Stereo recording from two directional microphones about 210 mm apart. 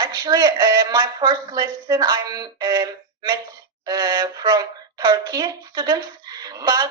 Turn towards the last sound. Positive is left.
turn(degrees=-20)  # may be behind; listen again after turning